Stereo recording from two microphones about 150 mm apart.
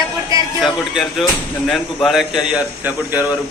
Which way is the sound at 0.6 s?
Centre (ahead or behind).